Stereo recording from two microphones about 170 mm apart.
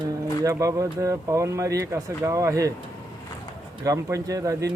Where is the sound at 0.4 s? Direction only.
20° right (ahead or behind).